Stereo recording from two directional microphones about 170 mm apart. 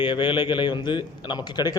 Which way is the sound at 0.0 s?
30° left (ahead or behind).